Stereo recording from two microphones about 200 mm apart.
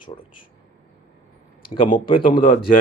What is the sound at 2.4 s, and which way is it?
Speech, 45° left (ahead or behind).